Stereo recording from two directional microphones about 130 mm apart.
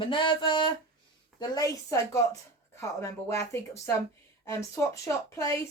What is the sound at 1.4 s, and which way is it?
A woman's voice, 25° left (ahead or behind).